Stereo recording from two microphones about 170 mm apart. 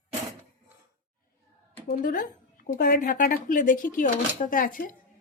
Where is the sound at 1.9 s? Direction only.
55° left (ahead or behind).